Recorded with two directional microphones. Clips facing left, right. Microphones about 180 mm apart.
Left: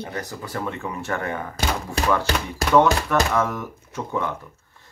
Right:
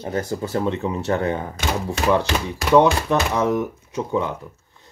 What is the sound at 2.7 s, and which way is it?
Speech, 15° right (ahead or behind).